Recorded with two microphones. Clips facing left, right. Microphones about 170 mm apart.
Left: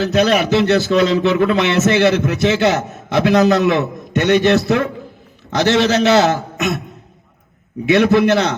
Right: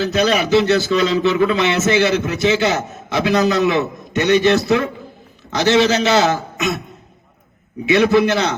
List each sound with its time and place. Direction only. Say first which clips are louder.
0.0 s a man's voice: left 2 dB; 60° left (ahead or behind)
7.9 s a man's voice: left 1 dB; 60° left (ahead or behind)